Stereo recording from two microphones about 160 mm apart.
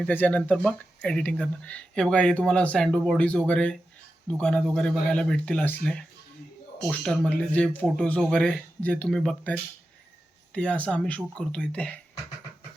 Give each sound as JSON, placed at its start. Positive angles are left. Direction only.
{"t": 0.0, "sound": "speech", "side_deg": 10}